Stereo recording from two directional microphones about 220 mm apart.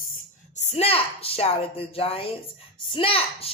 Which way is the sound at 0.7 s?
25° left (ahead or behind).